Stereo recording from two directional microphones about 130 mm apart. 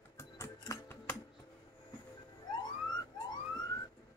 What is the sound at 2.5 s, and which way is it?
Police car, 30° left (ahead or behind).